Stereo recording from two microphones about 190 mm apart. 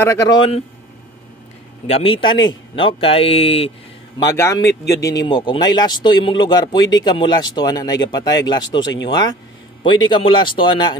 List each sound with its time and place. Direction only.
0.0 s speech: 15° left (ahead or behind)
1.9 s speech: 30° left (ahead or behind)
4.2 s a man's voice: 15° left (ahead or behind)
5.2 s speech: 25° left (ahead or behind)